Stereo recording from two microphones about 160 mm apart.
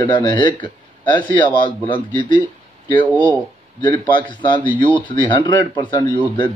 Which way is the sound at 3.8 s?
30° left (ahead or behind).